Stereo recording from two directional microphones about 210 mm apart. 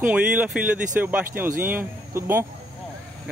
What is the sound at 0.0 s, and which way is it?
A man's voice, 5° right (ahead or behind).